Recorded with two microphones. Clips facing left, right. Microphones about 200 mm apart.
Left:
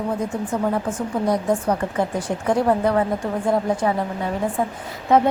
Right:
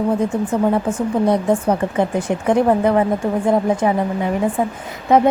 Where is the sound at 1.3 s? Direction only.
25° right (ahead or behind).